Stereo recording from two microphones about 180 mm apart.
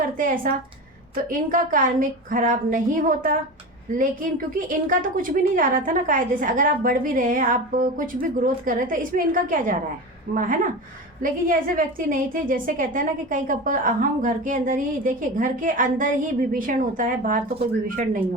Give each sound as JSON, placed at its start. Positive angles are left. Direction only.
{"t": 0.0, "sound": "a woman's voice", "side_deg": -50}